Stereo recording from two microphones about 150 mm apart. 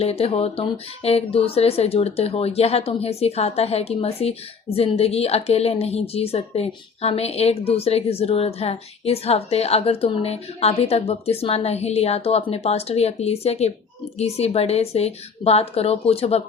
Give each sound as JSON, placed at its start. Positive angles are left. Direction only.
{"t": 0.0, "sound": "speech", "side_deg": 40}